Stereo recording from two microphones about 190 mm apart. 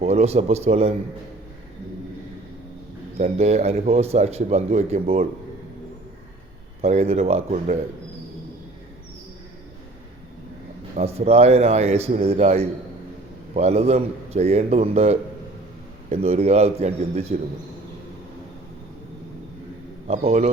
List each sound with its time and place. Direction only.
0.0 s a man's voice: 35° right (ahead or behind)
3.2 s a man's voice: 35° right (ahead or behind)
6.8 s a man's voice: 35° right (ahead or behind)
10.9 s a man's voice: 35° right (ahead or behind)
20.1 s a man's voice: 35° right (ahead or behind)